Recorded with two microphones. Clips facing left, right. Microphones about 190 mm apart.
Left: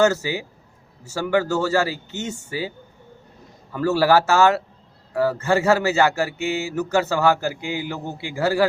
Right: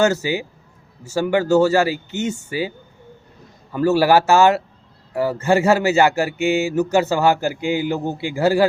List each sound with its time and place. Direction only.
0.0 s speech: 15° right (ahead or behind)